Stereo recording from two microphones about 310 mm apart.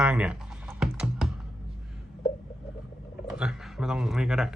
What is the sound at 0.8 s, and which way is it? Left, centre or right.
Computer keyboard, centre.